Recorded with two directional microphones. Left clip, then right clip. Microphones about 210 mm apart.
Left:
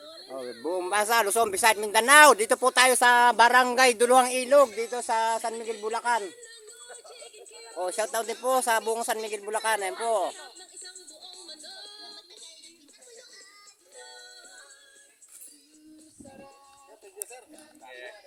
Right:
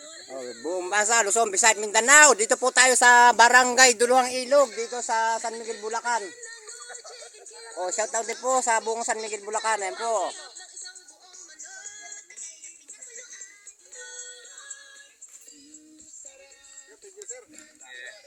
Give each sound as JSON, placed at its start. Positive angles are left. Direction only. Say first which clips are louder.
{"t": 0.0, "sound": "a sound", "louder": "right 1 dB", "side_deg": -50}
{"t": 0.3, "sound": "a sound", "louder": "right 1 dB", "side_deg": 0}
{"t": 0.6, "sound": "speech", "louder": "right 2 dB", "side_deg": 0}
{"t": 6.7, "sound": "music", "louder": "right 5 dB", "side_deg": 55}
{"t": 7.8, "sound": "speech", "louder": "right 1 dB", "side_deg": 5}
{"t": 10.5, "sound": "music", "louder": "right 4 dB", "side_deg": 20}
{"t": 11.4, "sound": "music", "louder": "right 3 dB", "side_deg": -10}
{"t": 13.9, "sound": "music", "louder": "right 4 dB", "side_deg": -35}